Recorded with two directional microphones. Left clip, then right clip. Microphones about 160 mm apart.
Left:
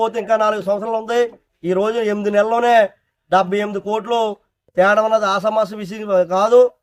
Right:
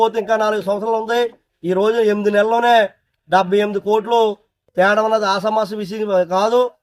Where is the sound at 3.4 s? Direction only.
30° left (ahead or behind).